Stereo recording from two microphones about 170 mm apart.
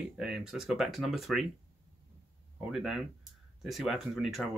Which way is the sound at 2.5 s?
Centre (ahead or behind).